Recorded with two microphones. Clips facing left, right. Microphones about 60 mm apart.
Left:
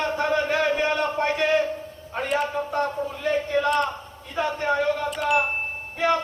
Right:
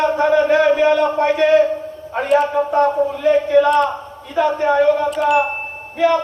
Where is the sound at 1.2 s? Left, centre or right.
Centre.